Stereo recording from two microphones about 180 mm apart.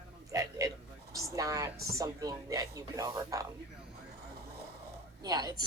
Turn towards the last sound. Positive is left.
turn(degrees=-20)  # may be behind; listen again after turning